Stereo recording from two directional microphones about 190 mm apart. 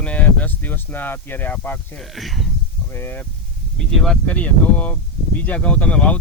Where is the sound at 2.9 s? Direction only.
10° left (ahead or behind).